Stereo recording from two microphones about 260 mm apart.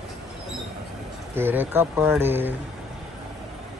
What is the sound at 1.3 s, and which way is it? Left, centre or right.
Speech, centre.